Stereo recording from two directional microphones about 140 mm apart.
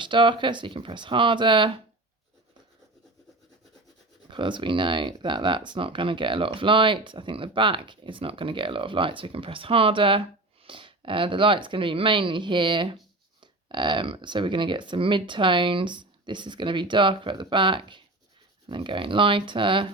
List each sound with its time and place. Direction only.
0.0 s speech: 35° right (ahead or behind)
4.3 s speech: 35° right (ahead or behind)